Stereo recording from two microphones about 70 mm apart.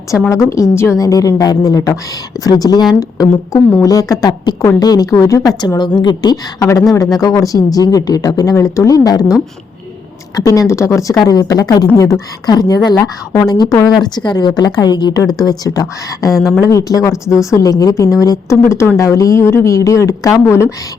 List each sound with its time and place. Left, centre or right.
0.3 s speech: left
0.9 s speech: left
3.0 s a woman's voice: left
8.5 s speech: left
10.3 s speech: left
11.1 s speech: left
11.9 s speech: left
12.5 s a woman's voice: left
13.0 s speech: left
13.5 s a woman's voice: left
15.1 s speech: left
15.4 s speech: left
16.3 s speech: centre
16.6 s speech: left